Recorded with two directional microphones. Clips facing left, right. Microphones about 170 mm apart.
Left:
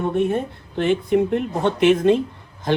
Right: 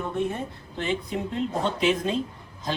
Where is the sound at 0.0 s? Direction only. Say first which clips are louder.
Left 8 dB; 65° left (ahead or behind).